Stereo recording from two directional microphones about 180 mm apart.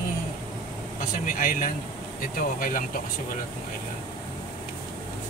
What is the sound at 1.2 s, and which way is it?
Speech, 50° left (ahead or behind).